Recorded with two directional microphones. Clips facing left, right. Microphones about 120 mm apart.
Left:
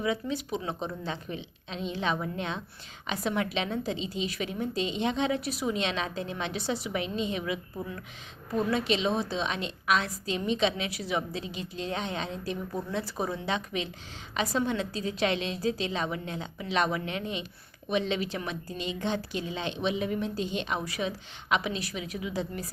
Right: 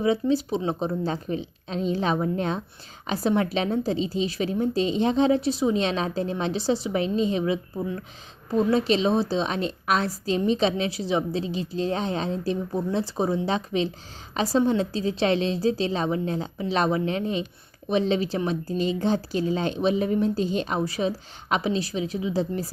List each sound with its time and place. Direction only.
0.0 s a woman's voice: 30° right (ahead or behind)